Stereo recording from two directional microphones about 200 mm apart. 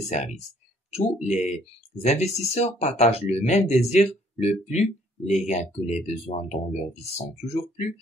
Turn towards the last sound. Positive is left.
turn(degrees=35)  # may be behind; listen again after turning